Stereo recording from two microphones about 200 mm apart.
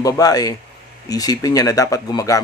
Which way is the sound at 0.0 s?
20° left (ahead or behind).